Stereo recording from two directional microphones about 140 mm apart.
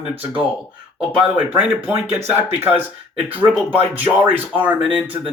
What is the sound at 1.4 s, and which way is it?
Speech, 10° right (ahead or behind).